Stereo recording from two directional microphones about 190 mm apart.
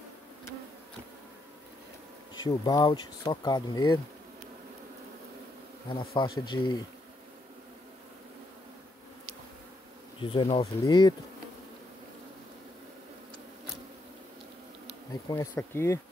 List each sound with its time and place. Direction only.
2.3 s speech: 20° left (ahead or behind)
5.9 s speech: 25° left (ahead or behind)
10.2 s speech: 30° left (ahead or behind)
15.2 s speech: 15° left (ahead or behind)